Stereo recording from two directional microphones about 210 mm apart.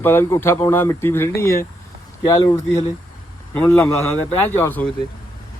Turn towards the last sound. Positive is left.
turn(degrees=10)  # may be behind; listen again after turning